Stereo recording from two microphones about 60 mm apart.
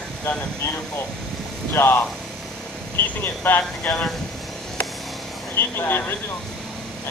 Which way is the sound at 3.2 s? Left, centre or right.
Left.